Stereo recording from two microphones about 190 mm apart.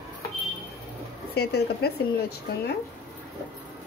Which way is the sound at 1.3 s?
55° left (ahead or behind).